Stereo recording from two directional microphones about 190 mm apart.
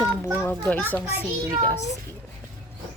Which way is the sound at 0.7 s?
10° left (ahead or behind).